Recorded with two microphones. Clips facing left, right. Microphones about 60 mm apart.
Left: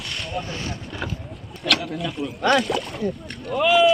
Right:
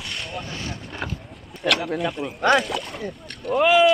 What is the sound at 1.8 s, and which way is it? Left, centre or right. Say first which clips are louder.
Speech: right 3 dB; right.